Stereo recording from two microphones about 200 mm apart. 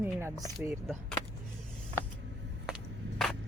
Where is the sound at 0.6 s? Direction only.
5° left (ahead or behind).